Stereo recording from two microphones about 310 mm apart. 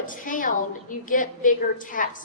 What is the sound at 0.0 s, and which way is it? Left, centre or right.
A woman's voice, left.